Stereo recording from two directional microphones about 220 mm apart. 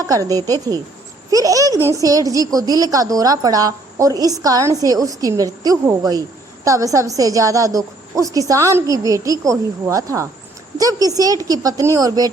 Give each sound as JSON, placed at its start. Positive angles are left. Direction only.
{"t": 0.0, "sound": "speech", "side_deg": -15}